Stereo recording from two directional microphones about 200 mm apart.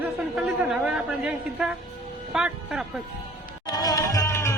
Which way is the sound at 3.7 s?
20° left (ahead or behind).